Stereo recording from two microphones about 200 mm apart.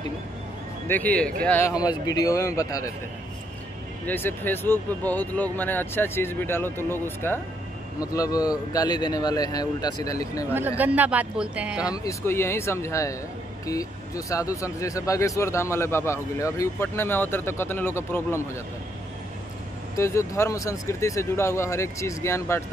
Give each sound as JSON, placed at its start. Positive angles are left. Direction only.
{"t": 0.8, "sound": "speech", "side_deg": 10}
{"t": 4.0, "sound": "speech", "side_deg": 10}
{"t": 10.8, "sound": "speech", "side_deg": -10}
{"t": 11.9, "sound": "speech", "side_deg": 15}
{"t": 20.0, "sound": "speech", "side_deg": 15}